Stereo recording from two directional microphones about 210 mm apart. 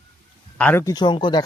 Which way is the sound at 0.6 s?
10° left (ahead or behind).